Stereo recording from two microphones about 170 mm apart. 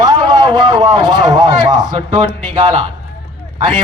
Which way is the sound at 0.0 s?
25° right (ahead or behind).